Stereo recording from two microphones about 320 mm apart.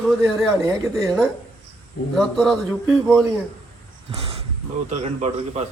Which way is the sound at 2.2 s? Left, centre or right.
Centre.